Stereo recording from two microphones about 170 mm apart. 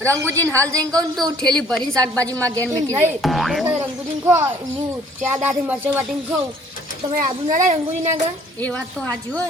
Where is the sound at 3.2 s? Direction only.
Centre (ahead or behind).